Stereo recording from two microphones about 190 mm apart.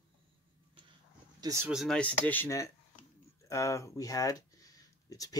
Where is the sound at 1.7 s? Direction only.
Centre (ahead or behind).